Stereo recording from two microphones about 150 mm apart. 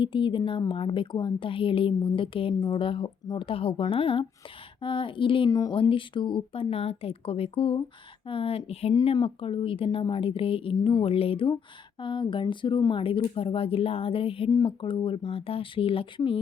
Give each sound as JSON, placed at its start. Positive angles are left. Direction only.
{"t": 0.0, "sound": "speech", "side_deg": 35}
{"t": 5.5, "sound": "a woman's voice", "side_deg": 25}
{"t": 5.7, "sound": "speech", "side_deg": 35}
{"t": 8.9, "sound": "speech", "side_deg": 30}